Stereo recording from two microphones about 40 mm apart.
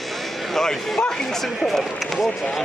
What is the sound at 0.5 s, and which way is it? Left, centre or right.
Speech, centre.